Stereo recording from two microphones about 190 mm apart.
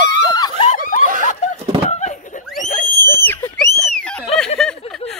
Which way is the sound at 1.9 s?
40° left (ahead or behind).